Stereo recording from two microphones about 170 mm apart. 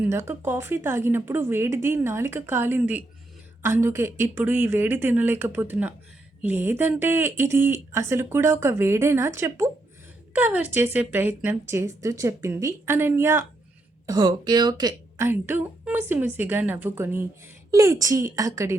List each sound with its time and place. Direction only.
0.0 s speech: 15° right (ahead or behind)
15.3 s speech: 10° right (ahead or behind)